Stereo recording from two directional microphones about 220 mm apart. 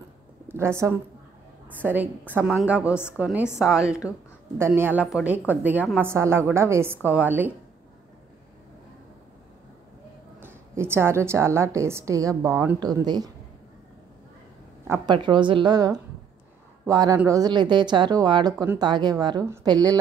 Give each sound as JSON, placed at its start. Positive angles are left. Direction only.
{"t": 0.5, "sound": "a woman's voice", "side_deg": -10}
{"t": 3.4, "sound": "a woman's voice", "side_deg": 10}
{"t": 4.6, "sound": "a woman's voice", "side_deg": -10}
{"t": 10.4, "sound": "a woman's voice", "side_deg": -10}
{"t": 14.9, "sound": "a woman's voice", "side_deg": -20}